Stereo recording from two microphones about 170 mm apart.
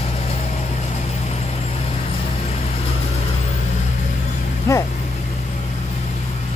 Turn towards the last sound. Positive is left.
turn(degrees=20)  # may be behind; listen again after turning